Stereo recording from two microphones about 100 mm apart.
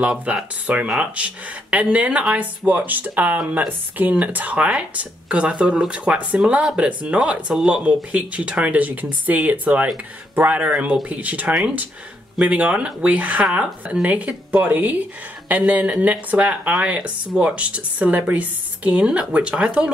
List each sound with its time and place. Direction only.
0.0 s speech: 15° right (ahead or behind)